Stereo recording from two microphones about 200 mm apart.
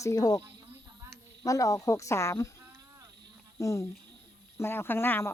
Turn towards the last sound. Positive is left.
turn(degrees=10)  # may be behind; listen again after turning